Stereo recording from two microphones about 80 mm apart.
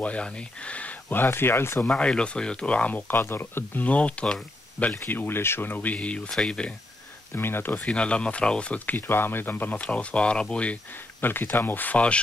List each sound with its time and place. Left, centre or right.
0.0 s speech: centre
1.9 s speech: centre; by 3.8 s left
3.8 s speech: centre
7.3 s speech: left
7.7 s speech: centre